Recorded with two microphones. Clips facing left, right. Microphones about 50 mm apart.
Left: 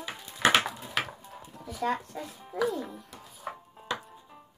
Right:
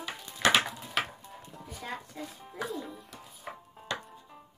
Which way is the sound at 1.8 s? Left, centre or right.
Left.